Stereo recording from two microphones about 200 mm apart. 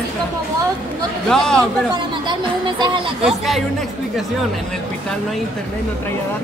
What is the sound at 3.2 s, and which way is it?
Speech, centre (ahead or behind).